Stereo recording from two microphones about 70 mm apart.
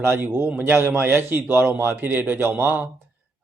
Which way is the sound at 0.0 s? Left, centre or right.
Right.